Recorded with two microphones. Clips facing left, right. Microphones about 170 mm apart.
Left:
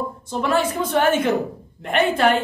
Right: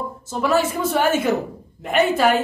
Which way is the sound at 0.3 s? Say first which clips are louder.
Right 1 dB; 5° right (ahead or behind).